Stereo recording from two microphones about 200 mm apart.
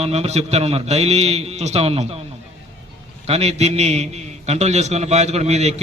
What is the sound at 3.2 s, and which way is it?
A man's voice, 30° right (ahead or behind).